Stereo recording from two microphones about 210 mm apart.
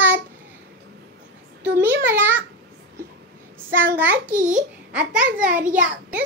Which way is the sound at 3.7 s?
10° right (ahead or behind).